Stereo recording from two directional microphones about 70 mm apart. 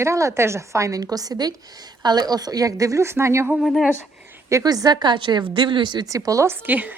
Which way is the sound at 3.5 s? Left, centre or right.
Centre.